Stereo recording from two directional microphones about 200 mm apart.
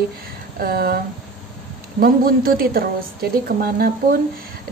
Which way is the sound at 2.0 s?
45° right (ahead or behind).